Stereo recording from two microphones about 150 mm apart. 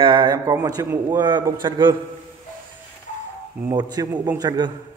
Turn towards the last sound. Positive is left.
turn(degrees=-25)  # may be behind; listen again after turning